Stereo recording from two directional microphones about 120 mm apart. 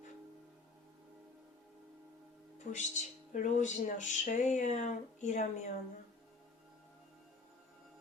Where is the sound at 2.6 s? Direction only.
90° left.